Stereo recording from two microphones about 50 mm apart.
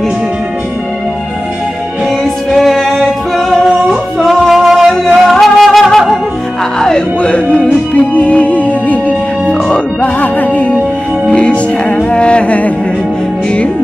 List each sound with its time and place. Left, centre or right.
2.5 s singing: centre
3.9 s music: centre
7.2 s music: left
10.2 s music: left